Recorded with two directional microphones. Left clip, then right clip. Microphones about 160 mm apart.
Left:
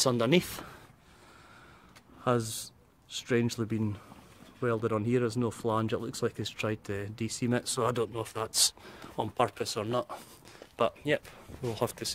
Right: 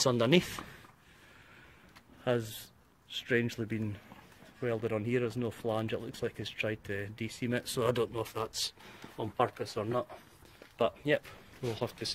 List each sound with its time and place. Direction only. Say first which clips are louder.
0.0 s speech: left 1 dB; 50° left (ahead or behind)
3.3 s speech: left 2 dB; 20° left (ahead or behind); by 8.5 s 40° left (ahead or behind)
8.5 s speech: left 8 dB; 60° left (ahead or behind); by 10.0 s 75° left (ahead or behind)
10.8 s speech: left 1 dB; 45° left (ahead or behind)